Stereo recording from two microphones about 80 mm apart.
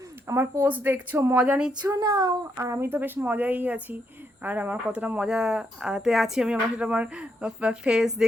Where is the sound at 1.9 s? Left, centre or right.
Right.